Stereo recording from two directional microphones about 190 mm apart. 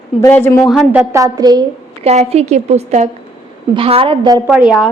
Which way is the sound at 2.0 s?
35° right (ahead or behind).